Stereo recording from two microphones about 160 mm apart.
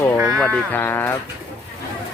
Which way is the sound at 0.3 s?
5° left (ahead or behind).